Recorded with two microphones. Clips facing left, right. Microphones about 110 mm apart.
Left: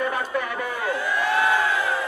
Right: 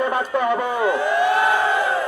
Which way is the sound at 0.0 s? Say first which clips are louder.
Right 5 dB; 25° right (ahead or behind).